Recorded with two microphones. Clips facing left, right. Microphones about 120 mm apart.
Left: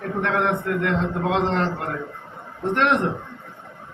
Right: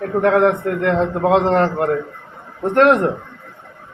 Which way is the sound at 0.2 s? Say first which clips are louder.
Right 9 dB; 45° right (ahead or behind).